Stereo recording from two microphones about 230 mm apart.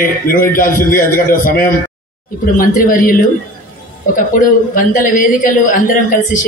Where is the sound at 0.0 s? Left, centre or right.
Left.